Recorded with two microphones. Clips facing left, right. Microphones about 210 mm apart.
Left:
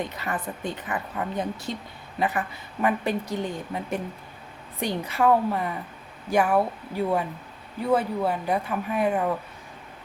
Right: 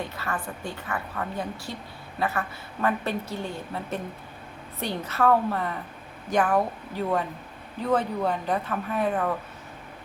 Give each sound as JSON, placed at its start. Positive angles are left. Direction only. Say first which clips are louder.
{"t": 0.2, "sound": "a woman's voice", "louder": "left 2 dB", "side_deg": 20}